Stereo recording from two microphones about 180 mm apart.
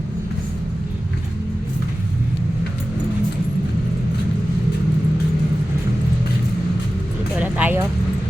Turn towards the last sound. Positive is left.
turn(degrees=-10)  # may be behind; listen again after turning